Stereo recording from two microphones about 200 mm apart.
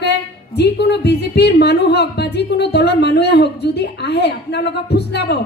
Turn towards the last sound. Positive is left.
turn(degrees=55)  # may be behind; listen again after turning